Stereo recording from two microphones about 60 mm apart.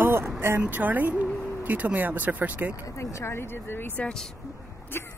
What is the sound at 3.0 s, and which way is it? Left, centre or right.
Speech, left.